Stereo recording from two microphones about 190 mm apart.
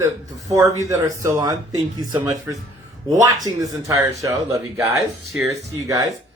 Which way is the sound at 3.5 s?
20° right (ahead or behind).